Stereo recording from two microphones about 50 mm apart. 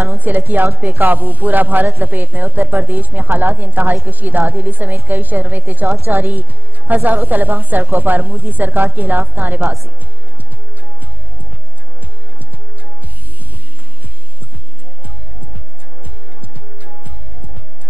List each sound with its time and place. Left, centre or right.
0.2 s a woman's voice: right